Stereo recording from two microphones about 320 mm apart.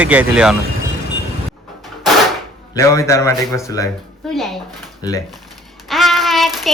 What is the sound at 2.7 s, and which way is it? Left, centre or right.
A man's voice, centre.